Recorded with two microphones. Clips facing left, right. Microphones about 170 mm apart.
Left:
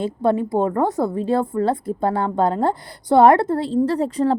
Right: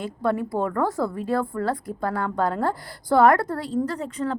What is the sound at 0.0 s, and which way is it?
A woman's voice, 25° left (ahead or behind).